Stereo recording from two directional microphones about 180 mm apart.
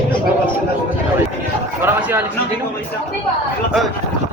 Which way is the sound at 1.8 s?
10° right (ahead or behind).